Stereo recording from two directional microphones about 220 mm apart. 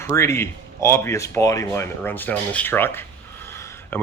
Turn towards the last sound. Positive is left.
turn(degrees=10)  # may be behind; listen again after turning